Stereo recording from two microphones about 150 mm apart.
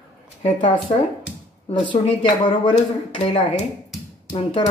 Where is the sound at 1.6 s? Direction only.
35° left (ahead or behind).